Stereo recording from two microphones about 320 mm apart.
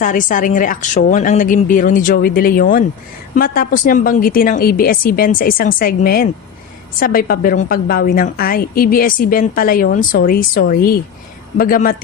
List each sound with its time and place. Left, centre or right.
0.0 s a woman's voice: left